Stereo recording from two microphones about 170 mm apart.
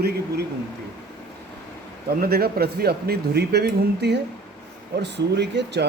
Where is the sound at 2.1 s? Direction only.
65° right (ahead or behind); by 5.8 s 90° right.